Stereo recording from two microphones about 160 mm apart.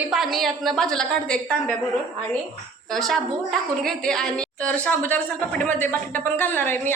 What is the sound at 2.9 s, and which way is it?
A woman's voice, centre (ahead or behind).